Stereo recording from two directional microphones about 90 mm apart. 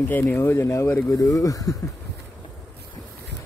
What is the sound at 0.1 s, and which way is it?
Speech, 20° left (ahead or behind).